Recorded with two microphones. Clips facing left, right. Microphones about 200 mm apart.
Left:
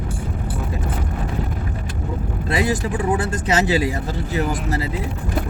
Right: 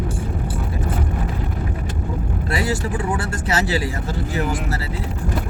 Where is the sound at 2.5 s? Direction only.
20° left (ahead or behind).